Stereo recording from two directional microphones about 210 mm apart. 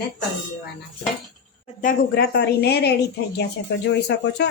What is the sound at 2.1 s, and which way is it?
A woman's voice, 50° left (ahead or behind).